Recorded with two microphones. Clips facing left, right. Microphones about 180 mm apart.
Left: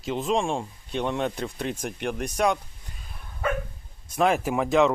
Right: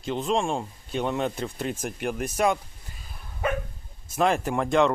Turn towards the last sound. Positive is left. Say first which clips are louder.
# left 1 dB
turn(degrees=0)  # may be behind; listen again after turning